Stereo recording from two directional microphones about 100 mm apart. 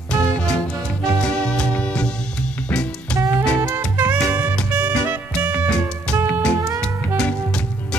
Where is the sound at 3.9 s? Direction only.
20° right (ahead or behind).